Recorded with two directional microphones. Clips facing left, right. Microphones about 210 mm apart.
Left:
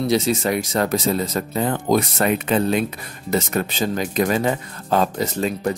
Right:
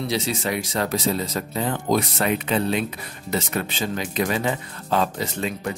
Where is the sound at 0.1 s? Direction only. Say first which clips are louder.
Left 6 dB; 45° left (ahead or behind).